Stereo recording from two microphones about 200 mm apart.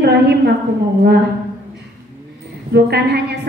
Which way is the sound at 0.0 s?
55° right (ahead or behind).